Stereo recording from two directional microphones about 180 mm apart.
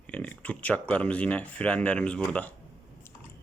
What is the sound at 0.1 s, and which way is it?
Speech, 5° left (ahead or behind).